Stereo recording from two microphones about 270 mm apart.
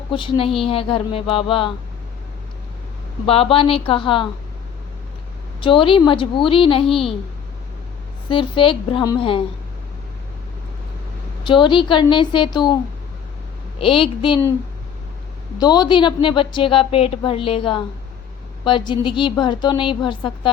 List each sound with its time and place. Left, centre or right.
0.1 s a woman's voice: centre
3.2 s a woman's voice: left
5.5 s a woman's voice: centre
6.8 s a child's voice: centre
8.3 s a woman's voice: centre
11.4 s a woman's voice: centre
13.7 s a woman's voice: centre
15.5 s a woman's voice: centre